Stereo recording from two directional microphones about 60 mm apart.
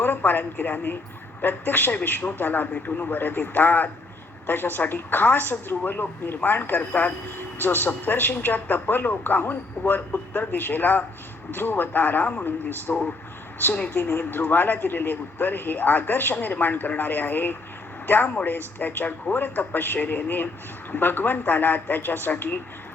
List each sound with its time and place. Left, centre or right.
0.0 s a woman's voice: left
13.9 s speech: left